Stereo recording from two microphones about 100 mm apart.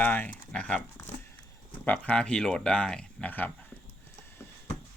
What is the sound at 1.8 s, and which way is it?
Speech, 15° left (ahead or behind).